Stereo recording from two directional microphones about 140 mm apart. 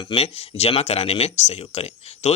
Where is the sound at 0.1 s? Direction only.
45° left (ahead or behind).